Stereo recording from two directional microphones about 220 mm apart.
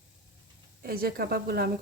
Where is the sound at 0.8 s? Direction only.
45° right (ahead or behind).